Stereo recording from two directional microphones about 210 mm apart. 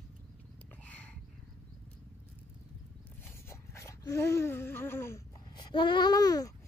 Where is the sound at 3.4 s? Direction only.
15° left (ahead or behind).